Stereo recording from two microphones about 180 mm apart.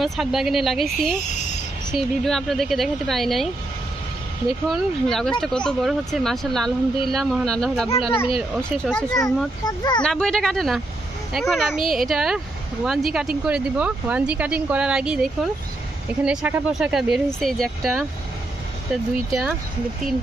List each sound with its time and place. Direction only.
0.0 s speech: centre (ahead or behind)
4.6 s speech: centre (ahead or behind)
9.7 s speech: 25° left (ahead or behind)
10.0 s speech: 5° left (ahead or behind)